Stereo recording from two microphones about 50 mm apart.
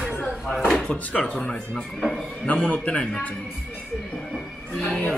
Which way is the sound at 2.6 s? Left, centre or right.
Left.